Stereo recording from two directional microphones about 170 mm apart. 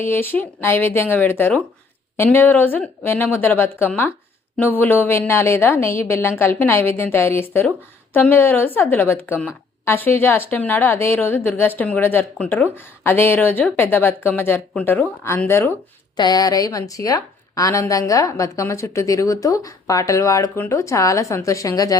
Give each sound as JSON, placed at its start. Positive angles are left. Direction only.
{"t": 0.0, "sound": "a woman's voice", "side_deg": 15}
{"t": 16.1, "sound": "a woman's voice", "side_deg": 25}